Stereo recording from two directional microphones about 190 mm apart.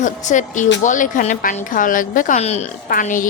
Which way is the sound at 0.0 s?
40° left (ahead or behind).